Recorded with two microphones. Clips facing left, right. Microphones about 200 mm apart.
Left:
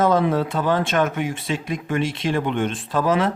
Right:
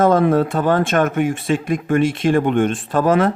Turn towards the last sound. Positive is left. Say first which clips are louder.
# right 4 dB
turn(degrees=-50)  # may be behind; listen again after turning